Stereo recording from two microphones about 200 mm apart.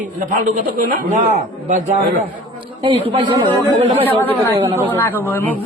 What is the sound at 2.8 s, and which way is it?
Speech, 25° right (ahead or behind).